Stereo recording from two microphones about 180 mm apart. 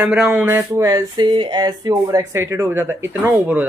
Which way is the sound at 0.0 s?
5° right (ahead or behind).